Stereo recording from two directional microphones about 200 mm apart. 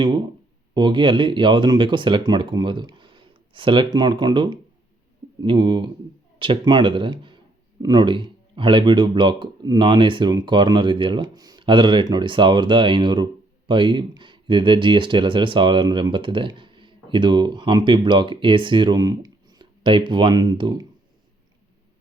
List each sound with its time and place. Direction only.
0.0 s speech: 20° right (ahead or behind)